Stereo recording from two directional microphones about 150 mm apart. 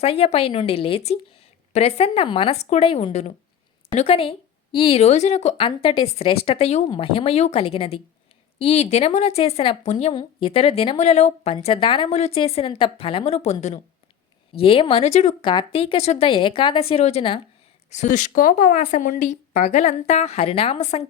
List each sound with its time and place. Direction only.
0.0 s a woman's voice: 40° left (ahead or behind)
5.6 s a woman's voice: 35° left (ahead or behind)
11.5 s a woman's voice: 35° left (ahead or behind)
15.4 s a woman's voice: 35° left (ahead or behind)
17.9 s speech: 55° left (ahead or behind)